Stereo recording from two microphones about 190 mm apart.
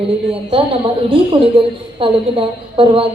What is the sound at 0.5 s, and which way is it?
A woman's voice, 30° right (ahead or behind).